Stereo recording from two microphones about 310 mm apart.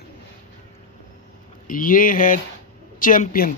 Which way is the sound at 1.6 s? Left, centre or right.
Left.